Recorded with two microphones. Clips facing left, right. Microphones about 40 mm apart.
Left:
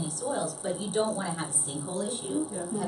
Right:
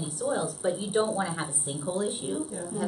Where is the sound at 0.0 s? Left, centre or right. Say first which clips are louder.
Right 2 dB; centre.